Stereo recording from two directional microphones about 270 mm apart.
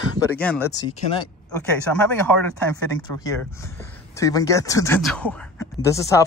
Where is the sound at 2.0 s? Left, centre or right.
Centre.